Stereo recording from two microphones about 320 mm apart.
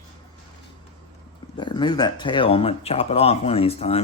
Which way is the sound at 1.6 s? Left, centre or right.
Centre.